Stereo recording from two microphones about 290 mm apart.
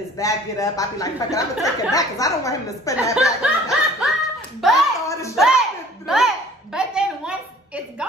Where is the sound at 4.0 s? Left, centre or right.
Centre.